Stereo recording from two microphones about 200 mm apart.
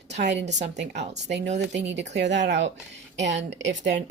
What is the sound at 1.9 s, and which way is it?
Speech, 60° right (ahead or behind).